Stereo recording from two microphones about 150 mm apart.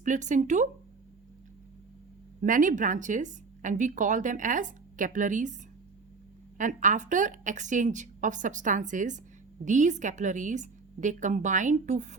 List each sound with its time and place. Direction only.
0.0 s speech: 55° right (ahead or behind)
2.4 s speech: 60° right (ahead or behind)
6.6 s speech: 55° right (ahead or behind)